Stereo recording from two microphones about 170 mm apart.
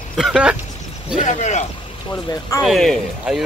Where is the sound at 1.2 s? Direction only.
45° left (ahead or behind).